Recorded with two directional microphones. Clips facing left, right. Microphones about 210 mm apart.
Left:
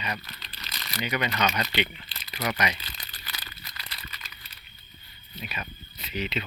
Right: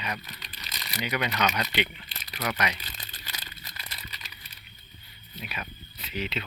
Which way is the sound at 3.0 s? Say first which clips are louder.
Even; 25° right (ahead or behind).